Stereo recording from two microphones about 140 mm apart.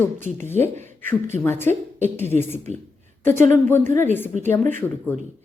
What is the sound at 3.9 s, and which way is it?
Speech, 60° right (ahead or behind).